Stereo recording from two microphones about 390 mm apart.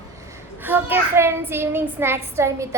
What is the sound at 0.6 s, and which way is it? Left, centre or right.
A child's voice, centre.